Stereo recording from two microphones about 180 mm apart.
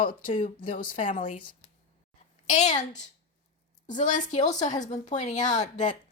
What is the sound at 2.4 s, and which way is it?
Speech, 40° left (ahead or behind).